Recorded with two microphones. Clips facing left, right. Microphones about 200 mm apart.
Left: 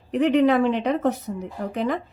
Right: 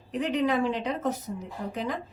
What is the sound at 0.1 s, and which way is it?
A woman's voice, 65° left (ahead or behind).